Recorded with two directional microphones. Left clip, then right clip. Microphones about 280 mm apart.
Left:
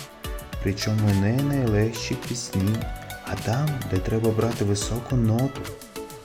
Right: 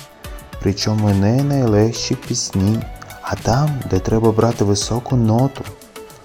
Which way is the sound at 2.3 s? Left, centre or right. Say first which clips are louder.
Right 8 dB; centre.